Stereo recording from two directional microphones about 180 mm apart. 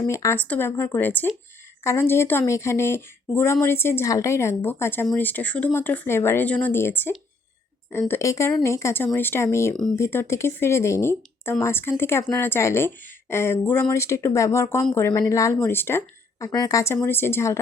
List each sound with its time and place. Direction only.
0.1 s speech: 15° left (ahead or behind)